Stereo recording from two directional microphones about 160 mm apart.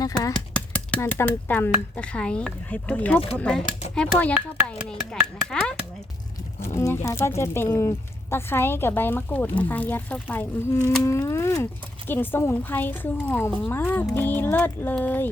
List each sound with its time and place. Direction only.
0.0 s speech: 25° left (ahead or behind)
0.3 s speech: 10° left (ahead or behind)
5.5 s speech: 5° left (ahead or behind)
6.7 s speech: 15° left (ahead or behind)